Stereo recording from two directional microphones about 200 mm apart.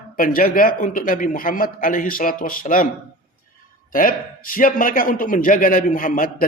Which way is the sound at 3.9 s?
45° left (ahead or behind).